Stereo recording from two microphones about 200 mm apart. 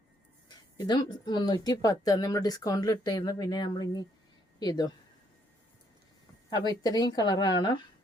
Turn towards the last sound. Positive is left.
turn(degrees=20)  # may be behind; listen again after turning